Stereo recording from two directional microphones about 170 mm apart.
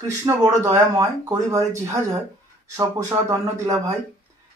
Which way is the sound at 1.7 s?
15° right (ahead or behind).